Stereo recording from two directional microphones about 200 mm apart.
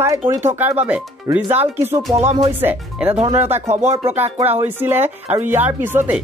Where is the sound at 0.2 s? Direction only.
15° right (ahead or behind).